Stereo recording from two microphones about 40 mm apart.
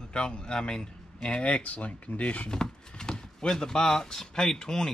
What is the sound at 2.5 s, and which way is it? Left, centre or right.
Speech, centre.